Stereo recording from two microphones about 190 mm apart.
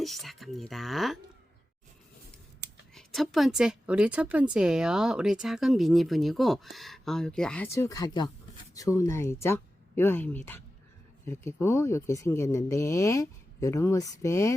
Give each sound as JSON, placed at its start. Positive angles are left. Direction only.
{"t": 0.0, "sound": "a woman's voice", "side_deg": 0}
{"t": 2.9, "sound": "a woman's voice", "side_deg": 0}